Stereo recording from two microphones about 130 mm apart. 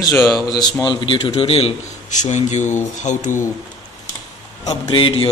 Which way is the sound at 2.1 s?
65° left (ahead or behind).